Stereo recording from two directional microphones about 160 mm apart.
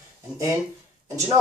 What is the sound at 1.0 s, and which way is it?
Speech, 20° right (ahead or behind).